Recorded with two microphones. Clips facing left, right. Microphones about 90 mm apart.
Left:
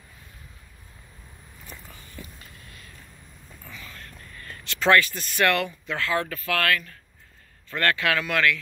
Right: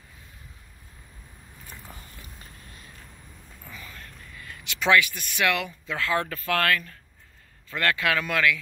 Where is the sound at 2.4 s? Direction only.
35° right (ahead or behind).